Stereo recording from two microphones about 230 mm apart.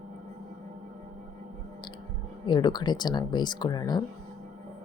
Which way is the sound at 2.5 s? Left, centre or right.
Centre.